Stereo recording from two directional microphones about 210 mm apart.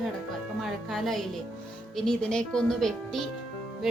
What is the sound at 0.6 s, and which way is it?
Speech, centre (ahead or behind).